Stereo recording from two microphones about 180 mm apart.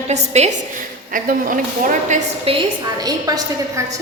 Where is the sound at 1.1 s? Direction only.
50° right (ahead or behind).